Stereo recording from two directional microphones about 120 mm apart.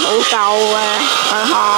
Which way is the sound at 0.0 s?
15° right (ahead or behind).